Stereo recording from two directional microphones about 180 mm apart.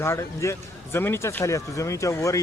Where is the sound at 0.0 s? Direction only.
15° left (ahead or behind).